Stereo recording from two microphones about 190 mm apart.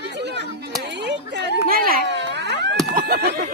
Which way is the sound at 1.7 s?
50° right (ahead or behind).